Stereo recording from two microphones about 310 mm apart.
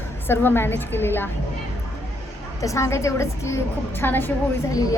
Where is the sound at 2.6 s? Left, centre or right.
Centre.